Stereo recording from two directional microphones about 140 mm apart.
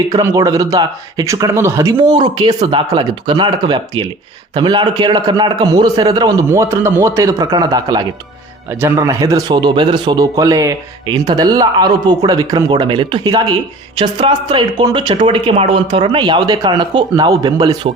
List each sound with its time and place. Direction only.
0.1 s speech: 20° right (ahead or behind)
2.0 s speech: 35° right (ahead or behind)